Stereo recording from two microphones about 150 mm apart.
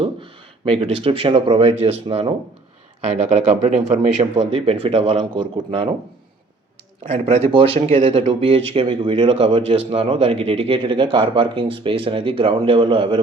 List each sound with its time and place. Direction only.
0.0 s speech: 35° right (ahead or behind)
3.2 s speech: 45° right (ahead or behind)
7.0 s speech: 50° right (ahead or behind); by 13.1 s 35° right (ahead or behind)